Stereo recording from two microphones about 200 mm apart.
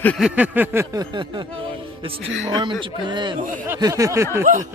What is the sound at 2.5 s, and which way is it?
A man's voice, 25° right (ahead or behind).